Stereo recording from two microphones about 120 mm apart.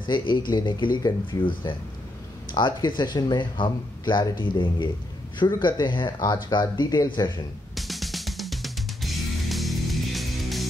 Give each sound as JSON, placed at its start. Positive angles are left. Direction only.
{"t": 0.0, "sound": "speech", "side_deg": 40}
{"t": 7.7, "sound": "music", "side_deg": 0}